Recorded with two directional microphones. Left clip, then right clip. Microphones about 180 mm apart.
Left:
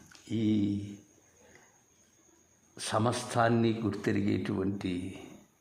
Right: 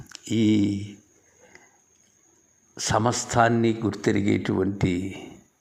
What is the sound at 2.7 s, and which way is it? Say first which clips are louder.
Speech: right 7 dB; 15° right (ahead or behind).